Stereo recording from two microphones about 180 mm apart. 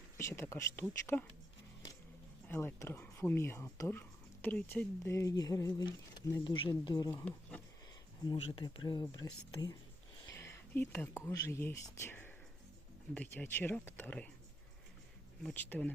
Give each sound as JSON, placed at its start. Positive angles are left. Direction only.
{"t": 0.2, "sound": "speech", "side_deg": 15}
{"t": 2.5, "sound": "speech", "side_deg": 10}
{"t": 7.1, "sound": "speech", "side_deg": 10}
{"t": 8.2, "sound": "speech", "side_deg": 25}
{"t": 15.4, "sound": "speech", "side_deg": 5}